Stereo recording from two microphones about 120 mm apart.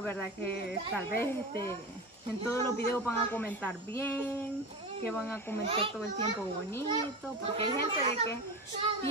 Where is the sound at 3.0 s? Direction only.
20° left (ahead or behind).